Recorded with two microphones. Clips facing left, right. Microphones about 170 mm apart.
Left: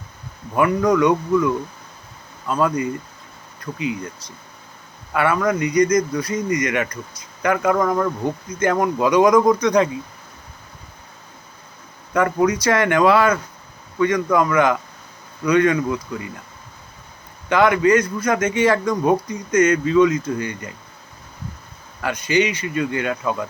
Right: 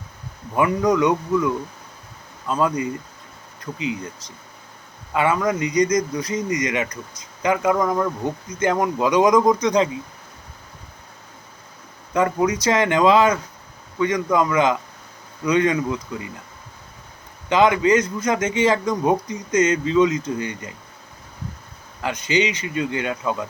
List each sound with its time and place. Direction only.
0.5 s a man's voice: 20° right (ahead or behind)
2.5 s a man's voice: 20° right (ahead or behind)
5.1 s a man's voice: 15° right (ahead or behind)
12.1 s a man's voice: 20° right (ahead or behind)
17.5 s a man's voice: 15° right (ahead or behind)
22.0 s a man's voice: 20° right (ahead or behind)